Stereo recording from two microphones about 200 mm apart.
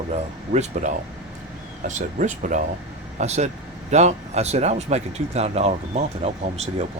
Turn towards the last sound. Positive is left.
turn(degrees=-30)  # may be behind; listen again after turning